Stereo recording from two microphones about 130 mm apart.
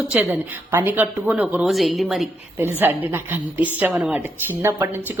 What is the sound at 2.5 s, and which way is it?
A woman's voice, 15° right (ahead or behind).